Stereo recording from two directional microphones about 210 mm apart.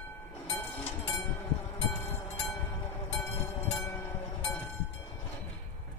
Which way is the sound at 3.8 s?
10° left (ahead or behind).